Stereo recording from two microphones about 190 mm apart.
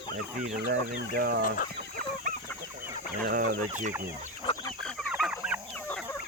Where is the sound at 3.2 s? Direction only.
55° right (ahead or behind).